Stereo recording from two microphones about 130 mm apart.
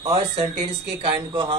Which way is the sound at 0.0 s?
45° right (ahead or behind).